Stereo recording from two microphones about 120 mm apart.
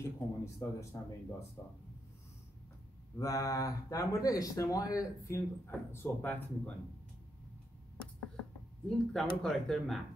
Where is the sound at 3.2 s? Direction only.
30° left (ahead or behind).